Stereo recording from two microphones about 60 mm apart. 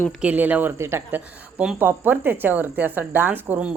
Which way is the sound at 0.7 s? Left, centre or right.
Right.